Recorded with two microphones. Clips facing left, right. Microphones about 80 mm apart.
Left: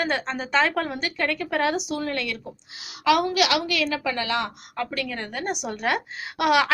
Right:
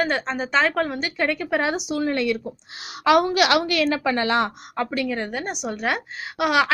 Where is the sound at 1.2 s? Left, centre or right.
Centre.